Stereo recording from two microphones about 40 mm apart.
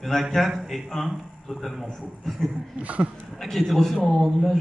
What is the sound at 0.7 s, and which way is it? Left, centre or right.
A man's voice, centre.